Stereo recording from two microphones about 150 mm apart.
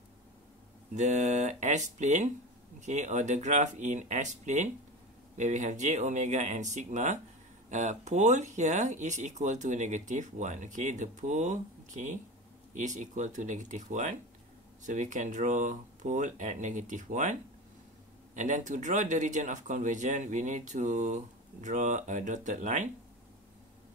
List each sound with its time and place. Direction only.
0.9 s speech: 50° right (ahead or behind)